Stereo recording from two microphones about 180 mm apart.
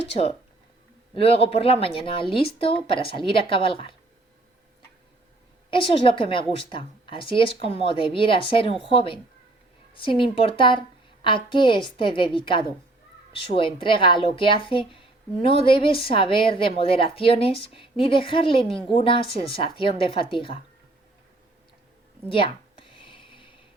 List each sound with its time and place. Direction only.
0.1 s a woman's voice: 35° left (ahead or behind)
5.7 s a woman's voice: 30° left (ahead or behind)
22.4 s a sound: 30° left (ahead or behind)